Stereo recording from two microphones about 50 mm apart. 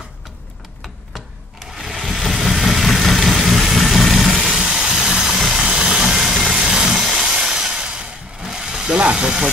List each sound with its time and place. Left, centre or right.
2.0 s vehicle: centre
4.5 s vehicle: centre
5.4 s engine: centre
5.7 s vehicle: centre
5.9 s sawing: centre; by 9.3 s right